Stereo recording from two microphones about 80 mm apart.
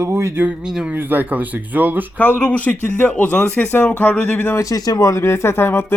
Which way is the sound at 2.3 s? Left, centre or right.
Centre.